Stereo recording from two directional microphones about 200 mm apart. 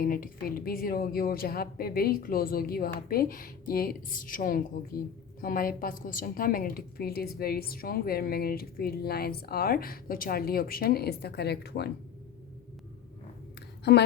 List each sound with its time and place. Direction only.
0.0 s a woman's voice: 45° left (ahead or behind)
13.9 s a woman's voice: 55° left (ahead or behind)